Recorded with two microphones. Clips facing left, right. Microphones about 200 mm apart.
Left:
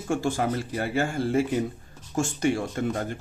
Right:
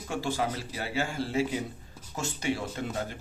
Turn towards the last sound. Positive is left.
turn(degrees=50)  # may be behind; listen again after turning